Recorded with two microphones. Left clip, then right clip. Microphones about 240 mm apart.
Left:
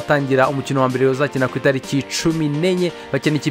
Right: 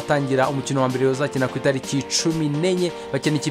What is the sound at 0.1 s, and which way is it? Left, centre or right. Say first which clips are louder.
Speech: left 4 dB; centre.